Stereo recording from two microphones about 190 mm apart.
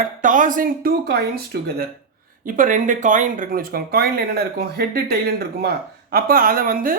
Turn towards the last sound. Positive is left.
turn(degrees=-50)  # may be behind; listen again after turning